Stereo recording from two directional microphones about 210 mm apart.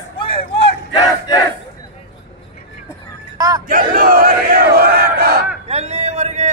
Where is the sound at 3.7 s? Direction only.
40° right (ahead or behind).